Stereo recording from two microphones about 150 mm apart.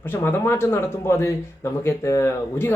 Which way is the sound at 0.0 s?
15° left (ahead or behind).